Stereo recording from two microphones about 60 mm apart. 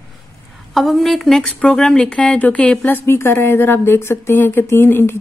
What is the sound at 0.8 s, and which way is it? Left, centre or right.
A woman's voice, centre.